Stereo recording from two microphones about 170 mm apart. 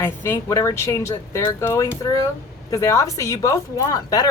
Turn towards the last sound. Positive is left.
turn(degrees=20)  # may be behind; listen again after turning